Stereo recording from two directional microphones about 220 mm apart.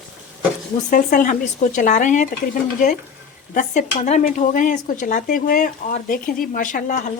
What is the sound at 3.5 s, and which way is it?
Speech, 35° left (ahead or behind).